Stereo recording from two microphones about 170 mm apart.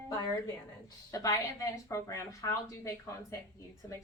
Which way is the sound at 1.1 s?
20° left (ahead or behind).